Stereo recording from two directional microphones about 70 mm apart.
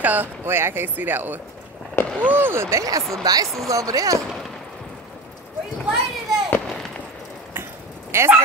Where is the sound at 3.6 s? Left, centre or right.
Right.